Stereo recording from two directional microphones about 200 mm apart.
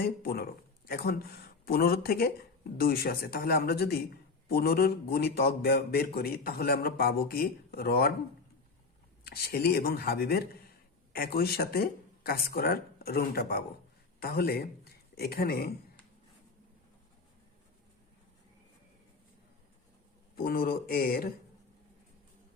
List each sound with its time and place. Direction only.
0.0 s a man's voice: 50° left (ahead or behind)
9.2 s a man's voice: 50° left (ahead or behind)
20.3 s a man's voice: 45° left (ahead or behind)